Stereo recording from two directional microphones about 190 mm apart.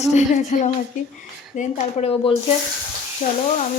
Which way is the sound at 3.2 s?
40° left (ahead or behind).